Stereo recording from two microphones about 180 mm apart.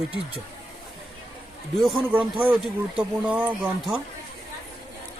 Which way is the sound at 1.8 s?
5° right (ahead or behind).